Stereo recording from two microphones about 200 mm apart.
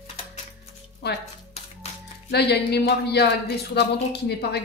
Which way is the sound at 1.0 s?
60° left (ahead or behind).